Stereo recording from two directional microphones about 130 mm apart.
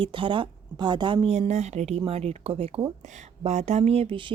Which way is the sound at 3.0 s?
65° right (ahead or behind).